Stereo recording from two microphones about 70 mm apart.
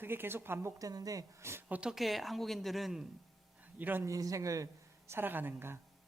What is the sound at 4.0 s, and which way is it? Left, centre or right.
Speech, right.